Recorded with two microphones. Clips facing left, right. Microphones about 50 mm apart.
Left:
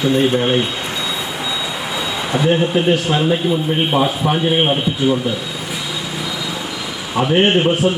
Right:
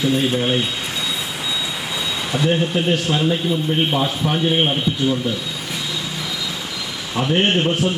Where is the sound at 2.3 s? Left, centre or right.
Centre.